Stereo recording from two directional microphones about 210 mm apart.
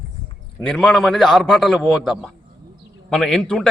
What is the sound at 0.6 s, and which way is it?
A man's voice, 5° left (ahead or behind).